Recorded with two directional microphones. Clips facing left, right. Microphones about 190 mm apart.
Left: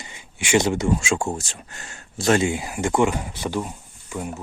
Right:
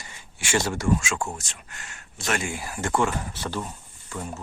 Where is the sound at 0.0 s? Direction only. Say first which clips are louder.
Left 4 dB; 15° left (ahead or behind).